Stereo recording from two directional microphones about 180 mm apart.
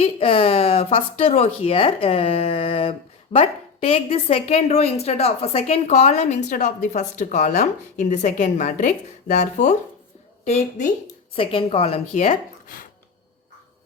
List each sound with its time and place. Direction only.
0.0 s a woman's voice: 30° left (ahead or behind)